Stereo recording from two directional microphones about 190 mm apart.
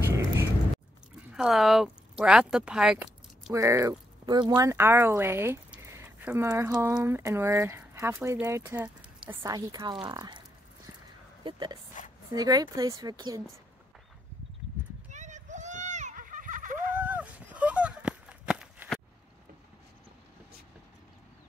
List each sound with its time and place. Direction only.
0.1 s vehicle: 15° right (ahead or behind)
1.3 s speech: centre (ahead or behind)
3.5 s speech: 15° right (ahead or behind)
11.4 s speech: 25° right (ahead or behind)
15.0 s a sound: 40° right (ahead or behind)
17.0 s a sound: 10° right (ahead or behind)